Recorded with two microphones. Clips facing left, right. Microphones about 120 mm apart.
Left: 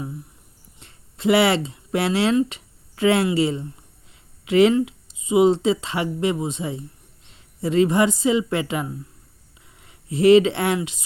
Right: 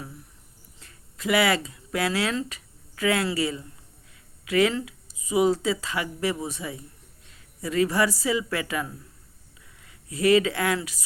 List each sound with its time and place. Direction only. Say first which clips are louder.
0.8 s a woman's voice: left 7 dB; 25° left (ahead or behind)